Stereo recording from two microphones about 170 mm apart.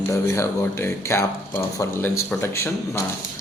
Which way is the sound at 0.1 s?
15° left (ahead or behind).